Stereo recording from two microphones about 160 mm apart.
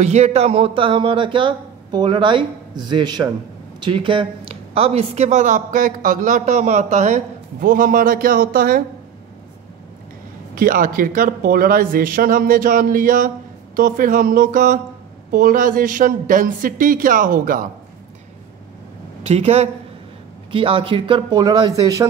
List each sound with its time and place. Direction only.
0.0 s a woman's voice: 45° right (ahead or behind); by 8.8 s 65° right (ahead or behind)
10.5 s speech: 60° right (ahead or behind)
19.2 s speech: 40° right (ahead or behind); by 22.0 s 25° right (ahead or behind)